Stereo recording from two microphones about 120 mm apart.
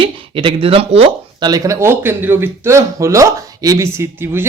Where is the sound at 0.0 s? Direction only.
45° right (ahead or behind).